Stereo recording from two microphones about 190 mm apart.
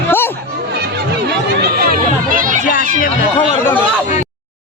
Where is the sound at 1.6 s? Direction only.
50° right (ahead or behind).